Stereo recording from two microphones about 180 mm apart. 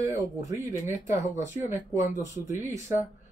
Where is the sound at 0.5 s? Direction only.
20° right (ahead or behind).